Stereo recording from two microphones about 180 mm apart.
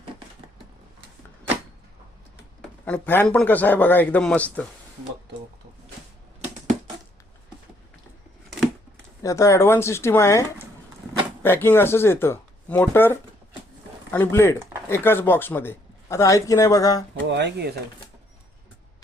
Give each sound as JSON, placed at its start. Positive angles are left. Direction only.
{"t": 2.8, "sound": "speech", "side_deg": 10}
{"t": 9.2, "sound": "speech", "side_deg": 15}
{"t": 11.4, "sound": "speech", "side_deg": 10}
{"t": 17.2, "sound": "speech", "side_deg": -75}